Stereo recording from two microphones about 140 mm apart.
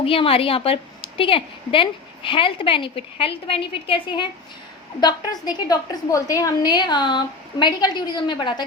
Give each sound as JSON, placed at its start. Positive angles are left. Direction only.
{"t": 0.0, "sound": "a woman's voice", "side_deg": 40}